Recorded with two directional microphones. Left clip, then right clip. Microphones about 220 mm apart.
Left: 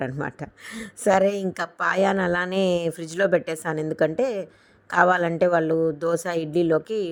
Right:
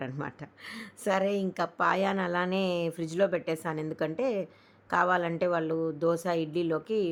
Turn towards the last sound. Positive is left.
turn(degrees=25)  # may be behind; listen again after turning